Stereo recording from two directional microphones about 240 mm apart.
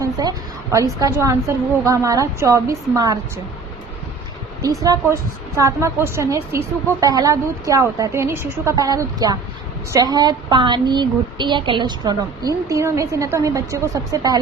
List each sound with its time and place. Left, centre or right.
0.0 s a sound: centre
0.9 s a woman's voice: centre
4.6 s a woman's voice: centre